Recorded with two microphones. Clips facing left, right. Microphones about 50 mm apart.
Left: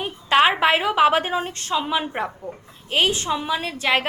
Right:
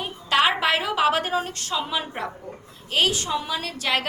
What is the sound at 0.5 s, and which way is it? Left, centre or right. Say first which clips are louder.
A woman's voice: left 4 dB; left.